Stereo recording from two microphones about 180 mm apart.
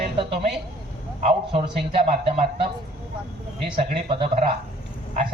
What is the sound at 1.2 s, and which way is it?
Speech, 35° right (ahead or behind).